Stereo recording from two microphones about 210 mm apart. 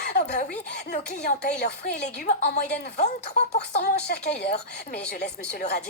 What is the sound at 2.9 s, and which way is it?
Speech, 35° left (ahead or behind).